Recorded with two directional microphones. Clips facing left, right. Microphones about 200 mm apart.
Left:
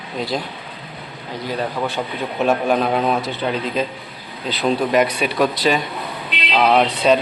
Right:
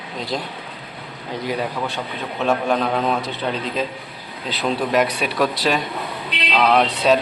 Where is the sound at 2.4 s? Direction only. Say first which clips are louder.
Left 2 dB; 10° left (ahead or behind).